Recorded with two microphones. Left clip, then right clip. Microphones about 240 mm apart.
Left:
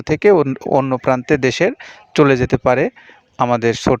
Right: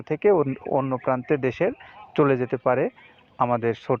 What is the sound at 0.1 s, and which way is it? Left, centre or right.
Speech, left.